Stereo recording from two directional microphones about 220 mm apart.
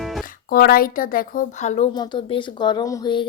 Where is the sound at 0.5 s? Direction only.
40° left (ahead or behind).